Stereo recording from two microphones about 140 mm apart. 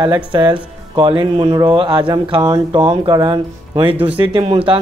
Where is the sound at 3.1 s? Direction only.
30° right (ahead or behind).